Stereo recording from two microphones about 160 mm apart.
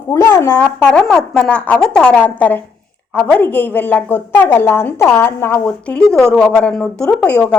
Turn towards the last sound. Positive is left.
turn(degrees=10)  # may be behind; listen again after turning